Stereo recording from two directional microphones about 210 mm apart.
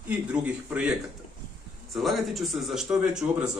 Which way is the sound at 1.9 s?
Centre (ahead or behind).